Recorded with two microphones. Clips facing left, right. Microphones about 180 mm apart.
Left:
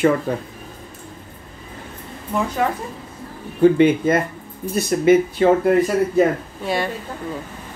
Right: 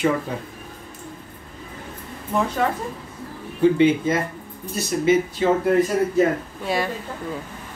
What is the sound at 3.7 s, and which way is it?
Speech, 55° left (ahead or behind).